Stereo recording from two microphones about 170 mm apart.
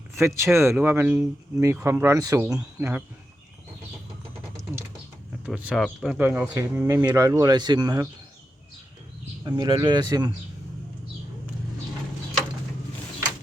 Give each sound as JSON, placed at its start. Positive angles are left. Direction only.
{"t": 0.2, "sound": "speech", "side_deg": -15}
{"t": 5.5, "sound": "speech", "side_deg": 0}
{"t": 6.1, "sound": "speech", "side_deg": -10}
{"t": 9.4, "sound": "speech", "side_deg": -25}